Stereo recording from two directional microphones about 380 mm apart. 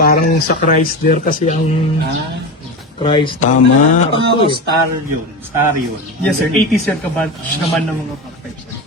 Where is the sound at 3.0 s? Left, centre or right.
Centre.